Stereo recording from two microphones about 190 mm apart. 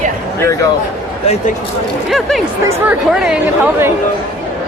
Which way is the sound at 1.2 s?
35° left (ahead or behind).